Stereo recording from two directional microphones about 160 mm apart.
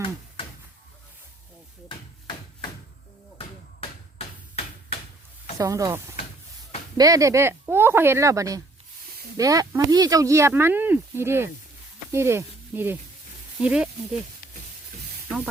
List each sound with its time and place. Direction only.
1.9 s a sound: 30° left (ahead or behind)
3.3 s hammer: 40° left (ahead or behind)
5.5 s speech: 20° right (ahead or behind)